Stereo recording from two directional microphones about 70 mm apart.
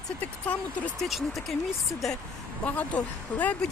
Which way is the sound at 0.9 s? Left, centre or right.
Centre.